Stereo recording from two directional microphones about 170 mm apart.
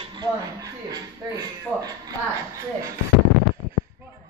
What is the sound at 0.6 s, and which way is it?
Speech, 20° right (ahead or behind).